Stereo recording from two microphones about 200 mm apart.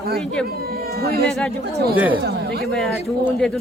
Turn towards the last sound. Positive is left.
turn(degrees=5)  # may be behind; listen again after turning